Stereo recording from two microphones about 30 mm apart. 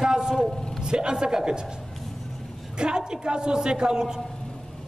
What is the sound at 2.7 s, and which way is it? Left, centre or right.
A woman's voice, right.